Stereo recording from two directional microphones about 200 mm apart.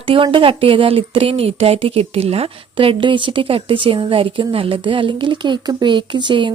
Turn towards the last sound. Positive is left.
turn(degrees=-25)  # may be behind; listen again after turning